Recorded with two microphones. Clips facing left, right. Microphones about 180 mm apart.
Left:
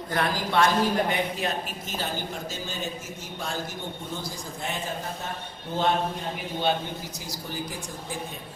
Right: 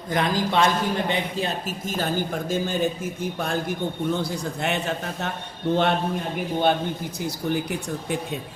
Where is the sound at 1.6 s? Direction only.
50° right (ahead or behind); by 5.3 s 70° right (ahead or behind).